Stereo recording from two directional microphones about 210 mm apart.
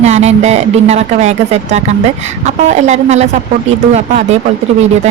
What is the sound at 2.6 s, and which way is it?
Speech, 35° right (ahead or behind).